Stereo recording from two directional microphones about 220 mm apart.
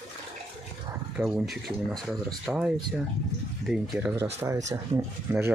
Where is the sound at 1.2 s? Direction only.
Centre (ahead or behind).